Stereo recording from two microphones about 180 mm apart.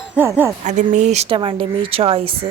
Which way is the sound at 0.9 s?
40° right (ahead or behind).